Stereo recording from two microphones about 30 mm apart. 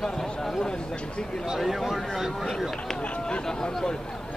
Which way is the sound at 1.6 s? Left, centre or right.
Centre.